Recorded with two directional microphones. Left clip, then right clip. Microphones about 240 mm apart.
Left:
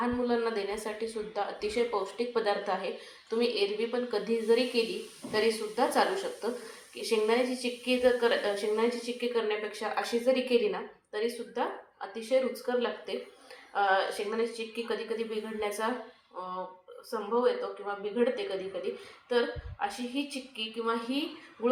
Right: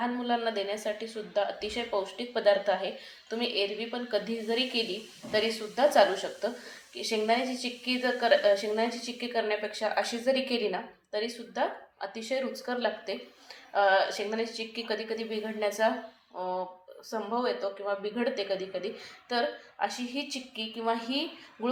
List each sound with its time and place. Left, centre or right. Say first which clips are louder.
0.0 s a woman's voice: even; centre; by 15.9 s right
17.1 s a woman's voice: left 2 dB; right